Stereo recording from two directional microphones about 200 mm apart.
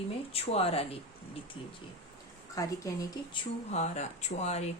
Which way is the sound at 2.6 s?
15° left (ahead or behind).